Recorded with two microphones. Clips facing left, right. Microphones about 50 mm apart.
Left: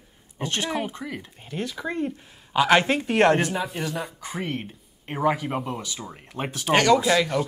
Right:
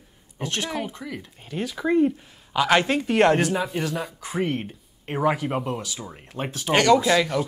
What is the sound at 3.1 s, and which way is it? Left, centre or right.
Speech, centre.